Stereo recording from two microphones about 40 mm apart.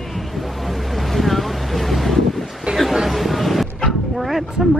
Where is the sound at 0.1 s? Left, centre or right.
Centre.